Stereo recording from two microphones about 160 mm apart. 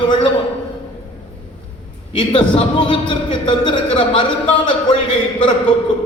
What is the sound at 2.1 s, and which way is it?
A man's voice, 30° left (ahead or behind).